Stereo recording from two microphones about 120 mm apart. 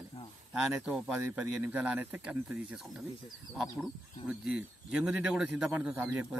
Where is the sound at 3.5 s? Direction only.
Centre (ahead or behind).